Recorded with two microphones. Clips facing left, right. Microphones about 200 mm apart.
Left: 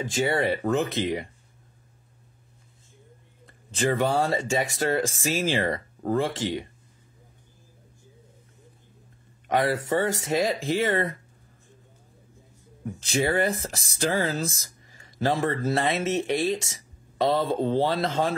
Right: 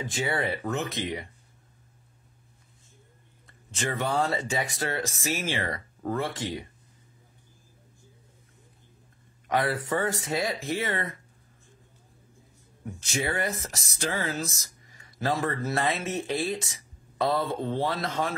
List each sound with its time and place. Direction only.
0.3 s speech: 25° left (ahead or behind)
3.4 s a sound: 30° left (ahead or behind)
4.0 s speech: 30° left (ahead or behind)
9.6 s speech: 25° left (ahead or behind)
13.0 s speech: 30° left (ahead or behind)